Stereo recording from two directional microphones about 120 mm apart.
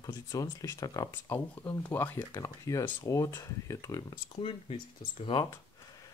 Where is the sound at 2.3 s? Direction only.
30° left (ahead or behind).